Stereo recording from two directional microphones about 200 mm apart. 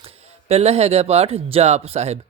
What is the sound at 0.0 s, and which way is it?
A man's voice, 30° right (ahead or behind).